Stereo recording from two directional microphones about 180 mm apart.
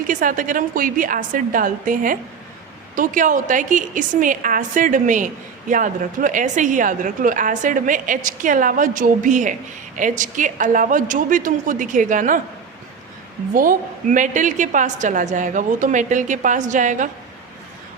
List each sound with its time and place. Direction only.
0.1 s a woman's voice: 50° right (ahead or behind)
13.5 s a woman's voice: 50° right (ahead or behind)